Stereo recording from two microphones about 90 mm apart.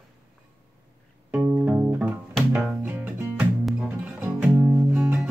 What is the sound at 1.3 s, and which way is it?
Music, 15° right (ahead or behind).